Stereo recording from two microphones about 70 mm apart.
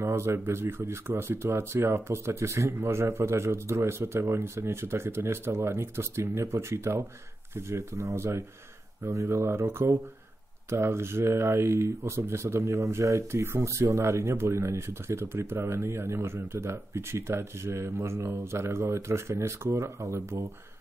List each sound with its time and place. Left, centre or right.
0.0 s speech: right